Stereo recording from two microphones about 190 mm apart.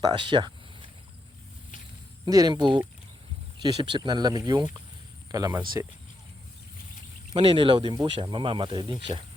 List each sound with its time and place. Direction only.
0.1 s speech: 25° right (ahead or behind)
2.2 s speech: 20° right (ahead or behind)
7.3 s speech: 30° right (ahead or behind)